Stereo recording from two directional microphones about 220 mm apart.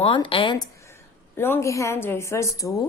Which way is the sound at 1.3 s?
10° left (ahead or behind).